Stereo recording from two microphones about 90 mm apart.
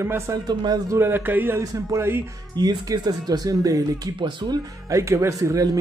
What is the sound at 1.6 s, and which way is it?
Speech, 35° right (ahead or behind).